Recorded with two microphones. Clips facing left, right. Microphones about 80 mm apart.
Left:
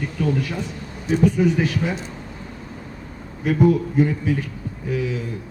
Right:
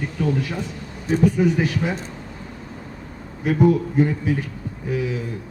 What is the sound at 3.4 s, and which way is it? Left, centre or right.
Speech, right.